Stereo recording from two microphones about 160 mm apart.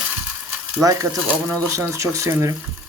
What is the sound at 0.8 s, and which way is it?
Speech, 20° right (ahead or behind).